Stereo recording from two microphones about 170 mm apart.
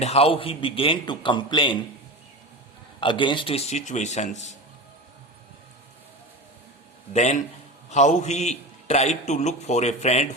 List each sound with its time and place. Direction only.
0.0 s a man's voice: 35° left (ahead or behind)
3.0 s a man's voice: 30° left (ahead or behind)
7.1 s a man's voice: 45° left (ahead or behind)